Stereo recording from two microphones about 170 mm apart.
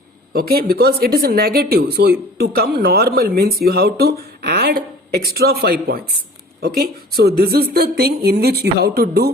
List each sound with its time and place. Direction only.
0.3 s a woman's voice: 65° right (ahead or behind)